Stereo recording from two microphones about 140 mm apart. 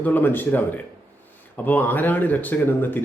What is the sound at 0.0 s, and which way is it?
Speech, 15° left (ahead or behind).